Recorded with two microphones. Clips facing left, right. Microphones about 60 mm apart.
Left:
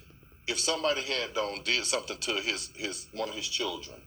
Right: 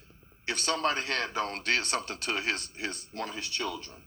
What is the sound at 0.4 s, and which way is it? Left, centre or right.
A man's voice, right.